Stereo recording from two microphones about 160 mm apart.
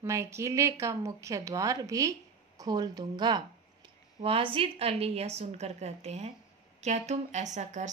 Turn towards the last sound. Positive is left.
turn(degrees=-50)  # may be behind; listen again after turning